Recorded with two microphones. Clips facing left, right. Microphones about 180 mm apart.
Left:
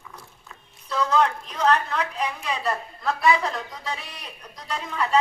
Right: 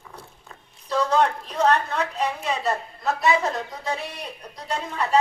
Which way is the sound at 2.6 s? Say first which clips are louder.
Right 1 dB; 20° right (ahead or behind).